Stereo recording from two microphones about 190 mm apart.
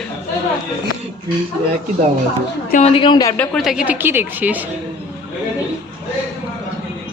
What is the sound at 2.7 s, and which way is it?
Speech, 40° left (ahead or behind).